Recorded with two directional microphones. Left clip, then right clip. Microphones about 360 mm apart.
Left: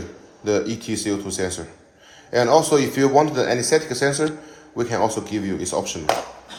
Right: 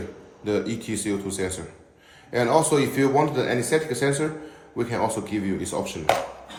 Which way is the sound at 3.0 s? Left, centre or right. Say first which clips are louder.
Left 4 dB; left.